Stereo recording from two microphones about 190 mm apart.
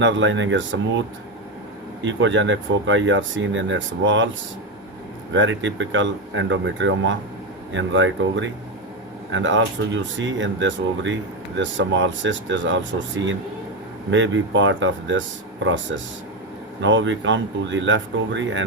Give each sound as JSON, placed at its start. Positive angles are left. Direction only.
{"t": 0.0, "sound": "speech", "side_deg": -75}
{"t": 2.0, "sound": "speech", "side_deg": -75}
{"t": 5.3, "sound": "speech", "side_deg": -80}
{"t": 16.8, "sound": "speech", "side_deg": -80}